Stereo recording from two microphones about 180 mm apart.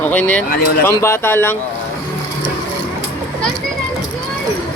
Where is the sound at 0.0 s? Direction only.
10° left (ahead or behind).